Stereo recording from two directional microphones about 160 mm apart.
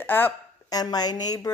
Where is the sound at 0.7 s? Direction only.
25° left (ahead or behind).